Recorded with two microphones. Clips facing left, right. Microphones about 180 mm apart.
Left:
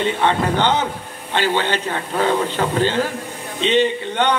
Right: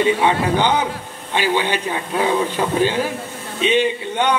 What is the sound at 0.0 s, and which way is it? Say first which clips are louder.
A man's voice: right 2 dB; 10° right (ahead or behind).